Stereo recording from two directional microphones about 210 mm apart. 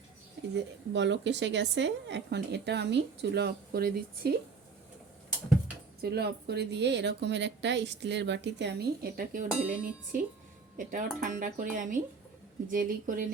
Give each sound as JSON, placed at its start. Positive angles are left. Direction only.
{"t": 0.5, "sound": "speech", "side_deg": -55}
{"t": 6.0, "sound": "speech", "side_deg": -50}
{"t": 9.6, "sound": "a sound", "side_deg": -5}
{"t": 10.8, "sound": "speech", "side_deg": -40}